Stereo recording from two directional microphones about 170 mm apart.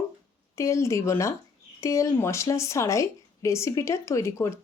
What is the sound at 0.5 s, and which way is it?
Speech, 15° left (ahead or behind).